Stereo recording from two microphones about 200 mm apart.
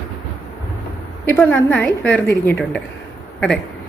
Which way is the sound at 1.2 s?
10° left (ahead or behind).